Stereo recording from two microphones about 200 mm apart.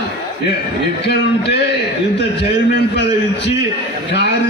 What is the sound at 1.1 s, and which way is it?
Speech, 55° left (ahead or behind).